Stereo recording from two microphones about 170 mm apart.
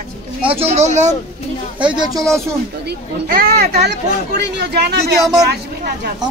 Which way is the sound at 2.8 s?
65° right (ahead or behind).